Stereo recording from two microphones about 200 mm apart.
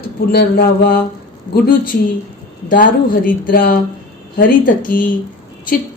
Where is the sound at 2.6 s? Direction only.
45° left (ahead or behind).